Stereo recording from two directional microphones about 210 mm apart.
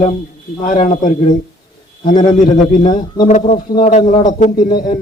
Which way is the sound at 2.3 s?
40° left (ahead or behind).